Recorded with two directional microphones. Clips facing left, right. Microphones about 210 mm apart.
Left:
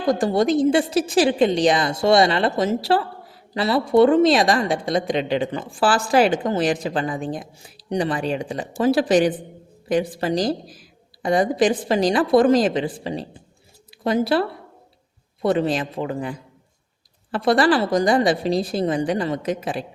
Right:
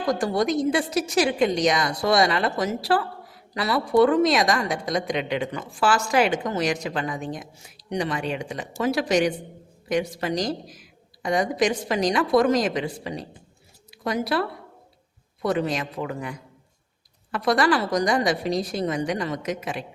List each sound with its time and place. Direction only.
0.0 s a woman's voice: 25° left (ahead or behind)